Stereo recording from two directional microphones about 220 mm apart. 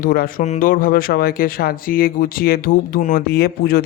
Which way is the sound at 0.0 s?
40° left (ahead or behind).